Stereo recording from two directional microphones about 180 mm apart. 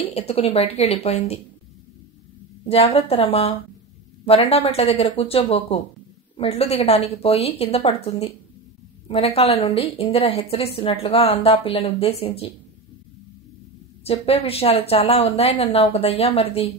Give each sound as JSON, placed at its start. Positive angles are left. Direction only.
{"t": 0.0, "sound": "a woman's voice", "side_deg": 35}
{"t": 2.6, "sound": "a woman's voice", "side_deg": 35}
{"t": 14.0, "sound": "a woman's voice", "side_deg": 35}